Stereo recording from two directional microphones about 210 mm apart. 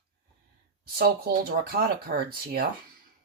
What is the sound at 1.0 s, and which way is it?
Speech, 45° right (ahead or behind).